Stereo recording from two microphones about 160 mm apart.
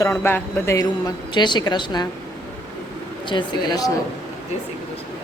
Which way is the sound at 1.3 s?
30° left (ahead or behind).